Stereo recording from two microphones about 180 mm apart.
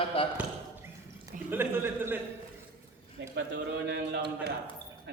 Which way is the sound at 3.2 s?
80° right.